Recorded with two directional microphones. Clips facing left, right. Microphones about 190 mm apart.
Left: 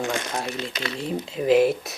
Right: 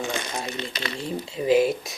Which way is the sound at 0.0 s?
Centre (ahead or behind).